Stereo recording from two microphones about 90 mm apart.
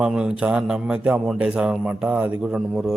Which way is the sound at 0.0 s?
10° right (ahead or behind).